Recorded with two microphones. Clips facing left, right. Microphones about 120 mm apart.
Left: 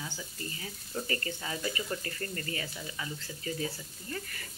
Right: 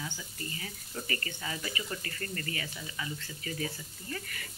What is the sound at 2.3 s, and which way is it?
Speech, 20° left (ahead or behind).